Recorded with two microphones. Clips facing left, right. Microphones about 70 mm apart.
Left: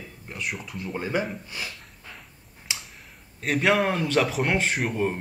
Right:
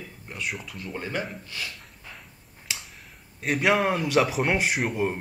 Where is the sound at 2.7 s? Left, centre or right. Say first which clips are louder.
Left 1 dB; centre.